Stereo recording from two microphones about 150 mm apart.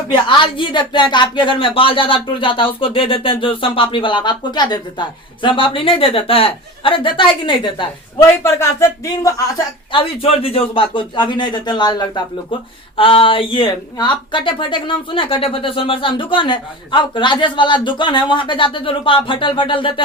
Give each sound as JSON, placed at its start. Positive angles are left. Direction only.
{"t": 0.1, "sound": "speech", "side_deg": 35}
{"t": 8.4, "sound": "speech", "side_deg": 20}
{"t": 9.9, "sound": "speech", "side_deg": 40}